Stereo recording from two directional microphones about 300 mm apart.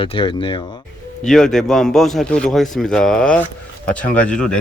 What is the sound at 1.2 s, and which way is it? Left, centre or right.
A man's voice, centre.